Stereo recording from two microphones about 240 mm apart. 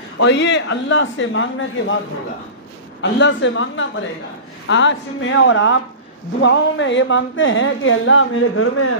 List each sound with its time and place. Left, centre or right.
0.2 s speech: left
3.0 s speech: left